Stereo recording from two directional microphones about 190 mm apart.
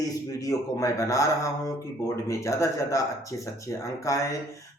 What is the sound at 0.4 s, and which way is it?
Speech, 15° left (ahead or behind).